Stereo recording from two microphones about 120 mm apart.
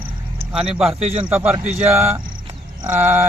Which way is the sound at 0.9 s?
60° right (ahead or behind).